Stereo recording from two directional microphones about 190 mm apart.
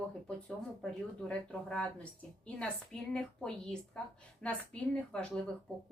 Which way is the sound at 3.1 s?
5° left (ahead or behind).